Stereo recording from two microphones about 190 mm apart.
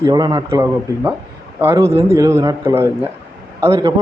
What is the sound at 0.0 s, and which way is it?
A man's voice, 20° right (ahead or behind).